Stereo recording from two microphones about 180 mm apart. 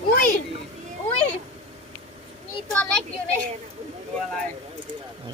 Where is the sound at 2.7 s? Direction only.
5° left (ahead or behind).